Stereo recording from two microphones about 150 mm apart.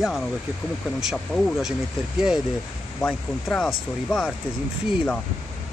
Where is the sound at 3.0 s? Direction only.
10° left (ahead or behind).